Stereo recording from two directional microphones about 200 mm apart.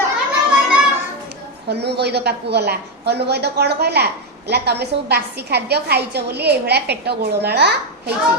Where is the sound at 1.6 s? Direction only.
55° right (ahead or behind).